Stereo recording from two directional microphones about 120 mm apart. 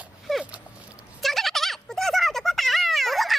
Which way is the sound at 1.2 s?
Centre (ahead or behind).